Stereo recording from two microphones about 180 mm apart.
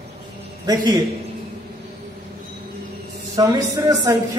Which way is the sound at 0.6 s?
20° right (ahead or behind).